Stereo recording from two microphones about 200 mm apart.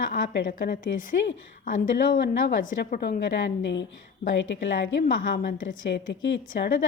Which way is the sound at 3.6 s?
65° left (ahead or behind).